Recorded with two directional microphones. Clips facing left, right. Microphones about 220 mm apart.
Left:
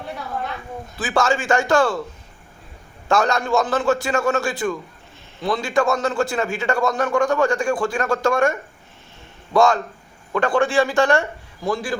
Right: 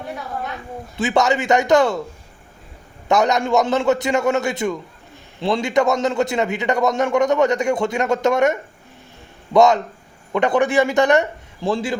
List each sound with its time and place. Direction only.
0.9 s a man's voice: 20° right (ahead or behind)
3.1 s a man's voice: 20° right (ahead or behind)